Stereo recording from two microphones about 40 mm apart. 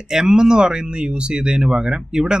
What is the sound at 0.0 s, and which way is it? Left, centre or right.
Speech, centre.